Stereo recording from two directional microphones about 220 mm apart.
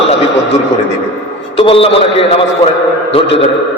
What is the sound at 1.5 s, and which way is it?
A man's voice, 25° left (ahead or behind).